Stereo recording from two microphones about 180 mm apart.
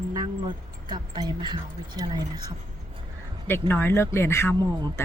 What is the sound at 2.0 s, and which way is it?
Speech, 20° right (ahead or behind).